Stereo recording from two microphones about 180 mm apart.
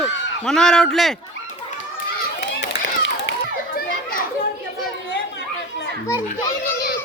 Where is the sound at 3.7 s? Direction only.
55° left (ahead or behind).